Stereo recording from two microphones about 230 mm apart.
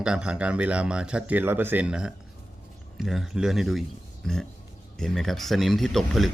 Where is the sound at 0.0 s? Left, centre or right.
Centre.